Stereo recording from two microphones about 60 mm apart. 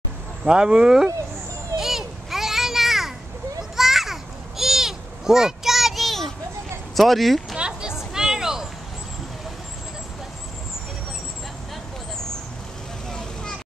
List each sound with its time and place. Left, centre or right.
0.4 s speech: centre
1.8 s children playing: centre
7.0 s speech: centre
7.5 s a sound: centre
13.1 s vehicle: centre